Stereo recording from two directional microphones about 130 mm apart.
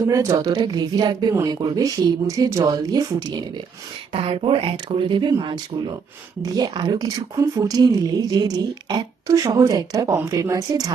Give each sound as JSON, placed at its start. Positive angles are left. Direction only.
{"t": 0.1, "sound": "a woman's voice", "side_deg": -25}
{"t": 4.1, "sound": "a woman's voice", "side_deg": -45}